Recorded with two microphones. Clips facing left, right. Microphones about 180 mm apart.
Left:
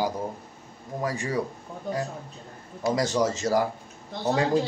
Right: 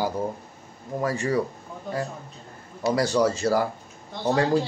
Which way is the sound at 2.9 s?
20° left (ahead or behind).